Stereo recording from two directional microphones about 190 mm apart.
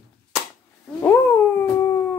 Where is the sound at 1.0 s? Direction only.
10° left (ahead or behind).